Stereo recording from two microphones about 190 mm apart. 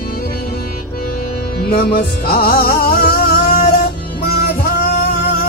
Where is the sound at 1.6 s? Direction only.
55° left (ahead or behind).